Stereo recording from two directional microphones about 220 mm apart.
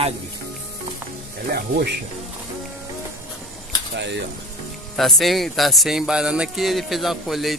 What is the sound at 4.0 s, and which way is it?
Speech, 55° right (ahead or behind).